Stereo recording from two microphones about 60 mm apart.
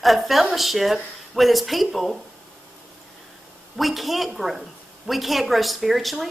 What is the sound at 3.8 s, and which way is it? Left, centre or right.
Speech, centre.